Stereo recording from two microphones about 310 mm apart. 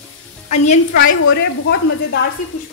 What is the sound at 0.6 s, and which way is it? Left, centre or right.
Speech, left.